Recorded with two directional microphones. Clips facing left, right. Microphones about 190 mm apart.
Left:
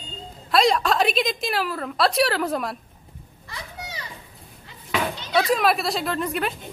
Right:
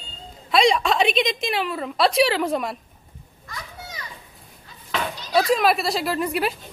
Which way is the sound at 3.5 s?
30° left (ahead or behind).